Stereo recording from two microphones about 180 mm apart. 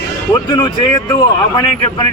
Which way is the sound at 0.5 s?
25° left (ahead or behind).